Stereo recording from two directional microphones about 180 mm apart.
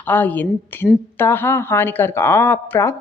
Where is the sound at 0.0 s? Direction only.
10° left (ahead or behind).